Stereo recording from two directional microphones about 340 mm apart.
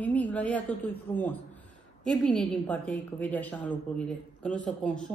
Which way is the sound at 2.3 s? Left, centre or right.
Centre.